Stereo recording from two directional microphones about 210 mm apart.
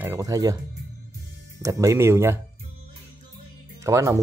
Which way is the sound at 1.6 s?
15° right (ahead or behind).